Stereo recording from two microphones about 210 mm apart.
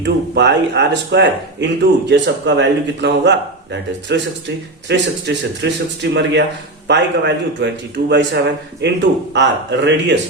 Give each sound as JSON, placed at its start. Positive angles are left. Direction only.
{"t": 0.0, "sound": "a man's voice", "side_deg": -55}